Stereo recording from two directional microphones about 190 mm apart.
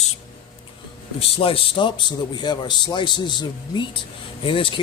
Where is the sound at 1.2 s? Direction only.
30° left (ahead or behind).